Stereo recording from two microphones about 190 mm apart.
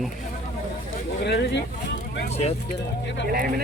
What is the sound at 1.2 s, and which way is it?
Speech, 65° left (ahead or behind).